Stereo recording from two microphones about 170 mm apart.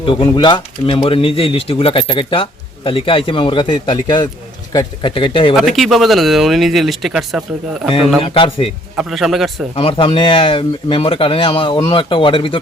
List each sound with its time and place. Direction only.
0.0 s speech: 30° left (ahead or behind)
5.5 s speech: centre (ahead or behind)
8.2 s speech: 30° left (ahead or behind)
9.0 s speech: centre (ahead or behind)
9.7 s speech: 35° left (ahead or behind)